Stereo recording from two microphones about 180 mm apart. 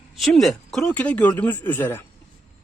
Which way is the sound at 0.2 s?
Centre (ahead or behind).